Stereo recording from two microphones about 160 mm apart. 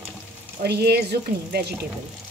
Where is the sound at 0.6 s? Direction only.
85° right.